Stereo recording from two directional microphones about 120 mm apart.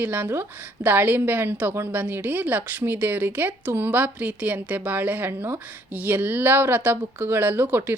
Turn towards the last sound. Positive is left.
turn(degrees=-20)  # may be behind; listen again after turning